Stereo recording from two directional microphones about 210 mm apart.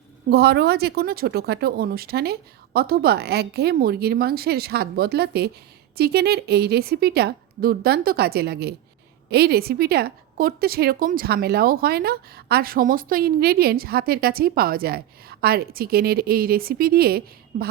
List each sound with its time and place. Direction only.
0.3 s a woman's voice: 50° right (ahead or behind)